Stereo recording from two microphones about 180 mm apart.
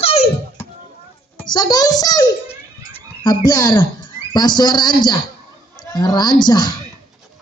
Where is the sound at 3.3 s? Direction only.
25° left (ahead or behind).